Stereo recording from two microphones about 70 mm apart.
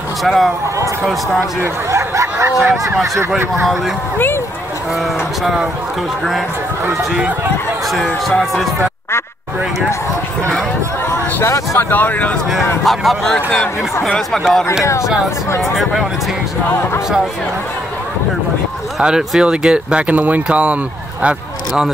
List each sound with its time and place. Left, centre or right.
0.2 s speech: centre
1.6 s a sound: right
2.5 s speech: centre
5.4 s speech: centre
7.9 s speech: centre
11.4 s speech: left
11.9 s speech: left
12.8 s speech: centre
18.9 s speech: centre